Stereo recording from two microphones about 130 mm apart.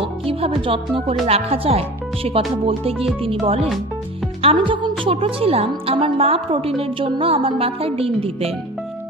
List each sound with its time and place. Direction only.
0.0 s a woman's voice: 45° right (ahead or behind)